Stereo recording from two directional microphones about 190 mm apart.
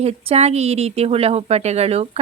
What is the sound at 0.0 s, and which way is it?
Speech, 35° right (ahead or behind).